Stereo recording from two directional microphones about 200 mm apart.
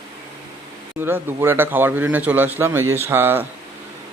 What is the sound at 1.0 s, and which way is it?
Speech, 10° right (ahead or behind).